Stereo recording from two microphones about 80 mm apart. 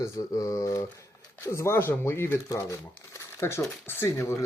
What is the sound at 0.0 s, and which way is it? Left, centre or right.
Speech, left.